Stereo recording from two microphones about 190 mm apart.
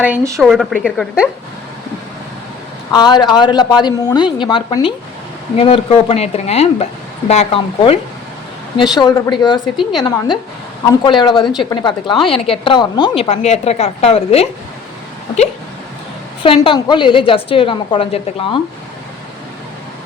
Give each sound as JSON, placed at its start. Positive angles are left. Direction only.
{"t": 0.0, "sound": "speech", "side_deg": -10}
{"t": 0.4, "sound": "a woman's voice", "side_deg": 0}
{"t": 2.9, "sound": "a woman's voice", "side_deg": 20}
{"t": 9.0, "sound": "a woman's voice", "side_deg": 20}
{"t": 16.4, "sound": "a woman's voice", "side_deg": 30}